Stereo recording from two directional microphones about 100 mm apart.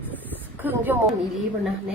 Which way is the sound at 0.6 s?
20° right (ahead or behind).